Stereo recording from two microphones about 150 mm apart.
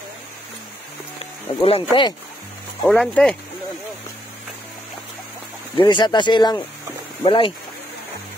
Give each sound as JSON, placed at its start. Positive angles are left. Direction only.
{"t": 1.6, "sound": "speech", "side_deg": 40}
{"t": 2.8, "sound": "speech", "side_deg": 5}
{"t": 5.8, "sound": "speech", "side_deg": 30}